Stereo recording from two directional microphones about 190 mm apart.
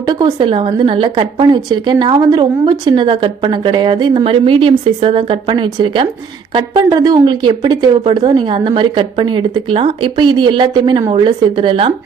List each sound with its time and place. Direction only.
0.0 s speech: 20° right (ahead or behind)